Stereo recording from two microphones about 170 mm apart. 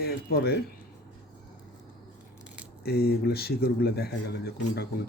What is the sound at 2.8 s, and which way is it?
Speech, 65° left (ahead or behind).